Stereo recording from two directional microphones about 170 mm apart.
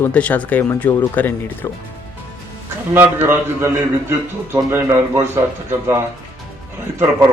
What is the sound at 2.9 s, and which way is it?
A man's voice, 10° right (ahead or behind).